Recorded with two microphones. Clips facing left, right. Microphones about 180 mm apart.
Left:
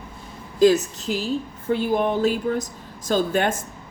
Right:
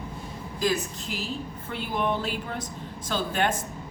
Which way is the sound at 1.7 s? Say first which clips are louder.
Left 7 dB; 40° left (ahead or behind).